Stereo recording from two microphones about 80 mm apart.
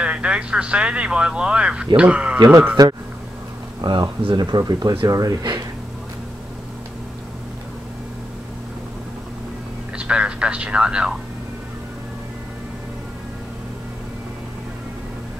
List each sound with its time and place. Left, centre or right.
0.0 s speech: centre
2.8 s speech: right
3.8 s speech: right
9.9 s a sound: centre